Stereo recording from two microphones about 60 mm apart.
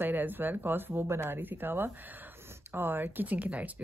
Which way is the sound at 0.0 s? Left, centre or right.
Right.